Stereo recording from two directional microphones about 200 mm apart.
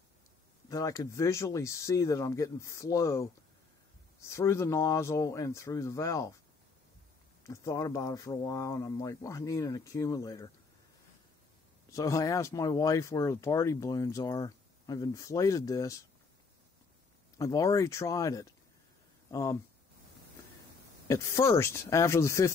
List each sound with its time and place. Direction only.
0.7 s speech: 15° left (ahead or behind)
7.4 s speech: 15° left (ahead or behind)
11.9 s speech: 15° left (ahead or behind)
17.4 s speech: 15° left (ahead or behind)
21.1 s speech: 15° left (ahead or behind)